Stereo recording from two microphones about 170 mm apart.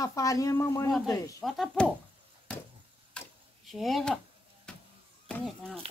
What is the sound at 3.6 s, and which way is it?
Speech, centre (ahead or behind).